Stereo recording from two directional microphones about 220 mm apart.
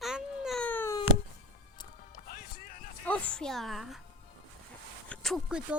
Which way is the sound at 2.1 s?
40° left (ahead or behind).